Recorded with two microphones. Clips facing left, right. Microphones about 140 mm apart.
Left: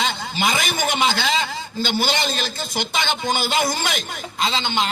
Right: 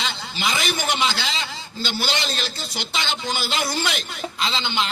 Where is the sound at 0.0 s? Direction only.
50° left (ahead or behind).